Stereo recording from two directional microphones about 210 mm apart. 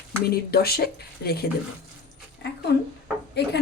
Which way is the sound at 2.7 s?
55° left (ahead or behind).